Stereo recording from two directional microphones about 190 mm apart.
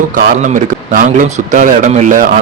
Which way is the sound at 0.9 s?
40° right (ahead or behind).